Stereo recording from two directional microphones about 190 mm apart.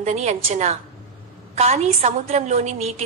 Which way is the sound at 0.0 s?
35° right (ahead or behind).